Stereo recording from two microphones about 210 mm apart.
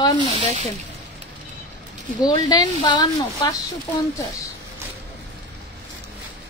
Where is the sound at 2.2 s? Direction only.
20° left (ahead or behind).